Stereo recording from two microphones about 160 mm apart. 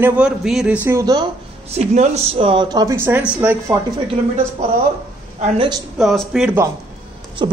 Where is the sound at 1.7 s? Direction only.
45° right (ahead or behind); by 2.9 s 25° right (ahead or behind).